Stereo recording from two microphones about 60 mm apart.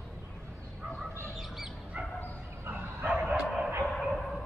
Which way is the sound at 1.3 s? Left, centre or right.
Centre.